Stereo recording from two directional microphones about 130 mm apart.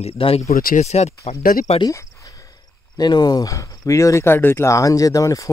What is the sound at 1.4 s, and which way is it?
Speech, 90° left.